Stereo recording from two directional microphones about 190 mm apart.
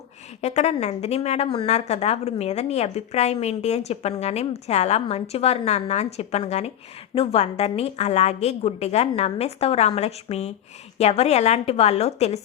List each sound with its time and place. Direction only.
0.4 s a woman's voice: 35° left (ahead or behind)